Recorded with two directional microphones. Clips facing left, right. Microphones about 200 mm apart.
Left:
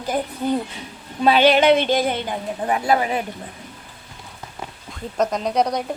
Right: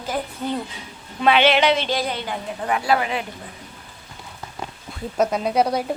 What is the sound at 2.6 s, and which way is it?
Speech, 25° left (ahead or behind).